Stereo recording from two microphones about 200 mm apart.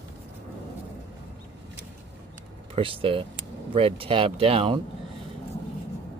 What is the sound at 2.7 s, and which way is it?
Speech, 25° right (ahead or behind).